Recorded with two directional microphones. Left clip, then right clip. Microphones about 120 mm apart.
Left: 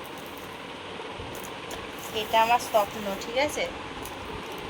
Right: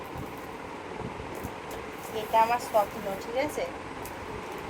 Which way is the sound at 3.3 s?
25° right (ahead or behind).